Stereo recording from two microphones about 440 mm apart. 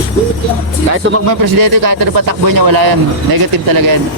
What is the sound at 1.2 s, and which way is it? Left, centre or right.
Speech, right.